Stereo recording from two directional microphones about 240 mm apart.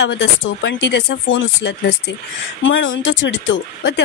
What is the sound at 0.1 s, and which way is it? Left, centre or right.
Speech, left.